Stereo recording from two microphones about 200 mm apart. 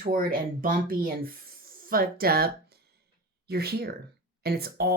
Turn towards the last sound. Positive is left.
turn(degrees=-50)  # may be behind; listen again after turning